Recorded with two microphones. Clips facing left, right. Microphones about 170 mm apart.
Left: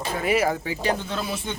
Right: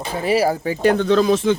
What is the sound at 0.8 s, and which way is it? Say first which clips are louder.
Speech: right 13 dB; 70° right (ahead or behind).